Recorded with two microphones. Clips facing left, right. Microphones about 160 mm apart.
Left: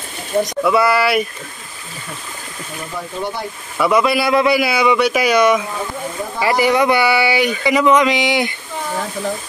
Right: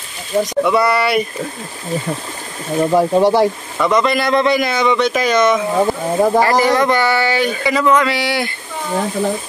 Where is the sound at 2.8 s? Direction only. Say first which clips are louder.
Right 14 dB; 65° right (ahead or behind); by 3.5 s 90° right.